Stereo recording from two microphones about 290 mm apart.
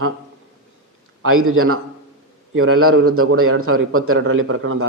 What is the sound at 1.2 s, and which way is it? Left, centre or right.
A man's voice, right.